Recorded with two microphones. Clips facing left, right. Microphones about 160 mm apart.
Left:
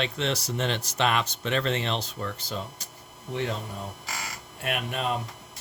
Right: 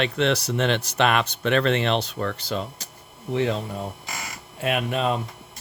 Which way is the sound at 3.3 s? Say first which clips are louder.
Right 7 dB; 90° right.